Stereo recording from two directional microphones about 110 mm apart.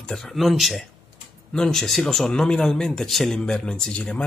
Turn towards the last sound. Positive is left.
turn(degrees=5)  # may be behind; listen again after turning